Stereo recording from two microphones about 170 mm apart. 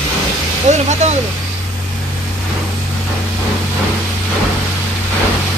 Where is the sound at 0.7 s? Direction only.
40° right (ahead or behind).